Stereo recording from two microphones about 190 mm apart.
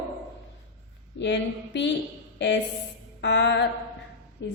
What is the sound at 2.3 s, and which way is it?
Speech, 70° left (ahead or behind).